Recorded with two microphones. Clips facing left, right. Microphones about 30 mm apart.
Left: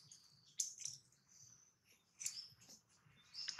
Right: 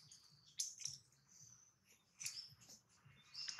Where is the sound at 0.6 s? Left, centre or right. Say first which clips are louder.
Left 1 dB; right.